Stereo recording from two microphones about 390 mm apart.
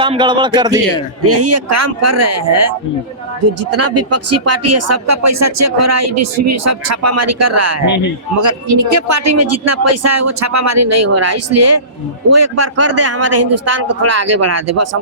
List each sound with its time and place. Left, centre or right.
0.0 s speech: centre
1.2 s speech: right